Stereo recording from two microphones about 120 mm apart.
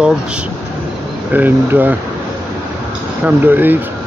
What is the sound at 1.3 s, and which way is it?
Speech, 15° right (ahead or behind).